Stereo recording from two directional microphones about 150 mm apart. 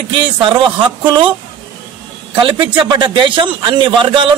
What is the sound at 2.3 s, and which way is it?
A man's voice, 30° right (ahead or behind).